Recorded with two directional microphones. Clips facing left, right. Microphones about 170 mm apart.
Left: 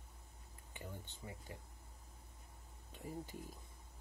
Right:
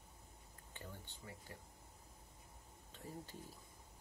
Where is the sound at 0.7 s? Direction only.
15° left (ahead or behind).